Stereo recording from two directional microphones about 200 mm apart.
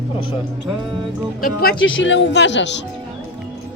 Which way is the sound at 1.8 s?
70° left (ahead or behind).